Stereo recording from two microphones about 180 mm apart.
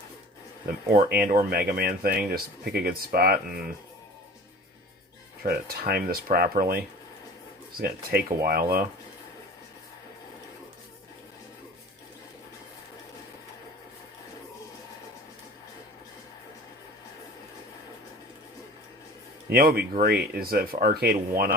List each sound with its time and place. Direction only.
0.9 s speech: 60° right (ahead or behind)
5.4 s speech: 55° right (ahead or behind)
8.4 s speech: 55° right (ahead or behind)
19.5 s speech: 60° right (ahead or behind)